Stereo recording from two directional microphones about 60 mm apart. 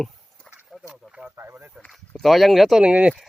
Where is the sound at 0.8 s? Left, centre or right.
Centre.